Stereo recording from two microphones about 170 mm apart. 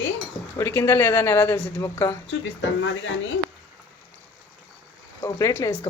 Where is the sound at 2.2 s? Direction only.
90° left.